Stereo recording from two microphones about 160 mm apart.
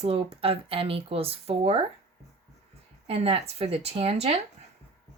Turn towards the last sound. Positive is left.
turn(degrees=-40)  # may be behind; listen again after turning